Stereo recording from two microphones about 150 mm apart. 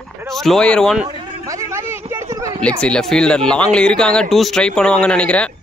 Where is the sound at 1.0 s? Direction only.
30° right (ahead or behind).